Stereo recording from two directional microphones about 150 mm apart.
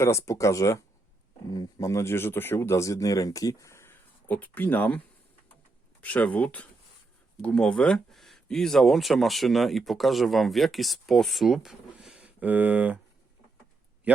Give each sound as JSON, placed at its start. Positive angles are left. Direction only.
{"t": 0.0, "sound": "speech", "side_deg": 20}
{"t": 6.0, "sound": "speech", "side_deg": 10}